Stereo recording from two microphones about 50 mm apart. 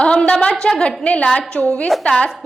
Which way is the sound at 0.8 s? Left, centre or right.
Left.